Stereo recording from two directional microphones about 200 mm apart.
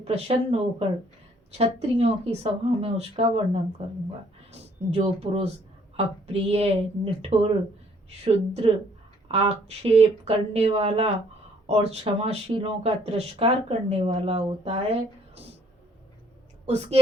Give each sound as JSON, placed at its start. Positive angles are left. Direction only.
{"t": 0.0, "sound": "speech", "side_deg": -30}